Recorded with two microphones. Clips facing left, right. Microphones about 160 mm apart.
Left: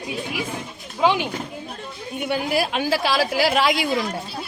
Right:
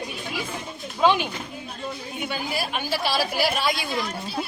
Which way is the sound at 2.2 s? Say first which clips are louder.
Left 7 dB; 75° left (ahead or behind).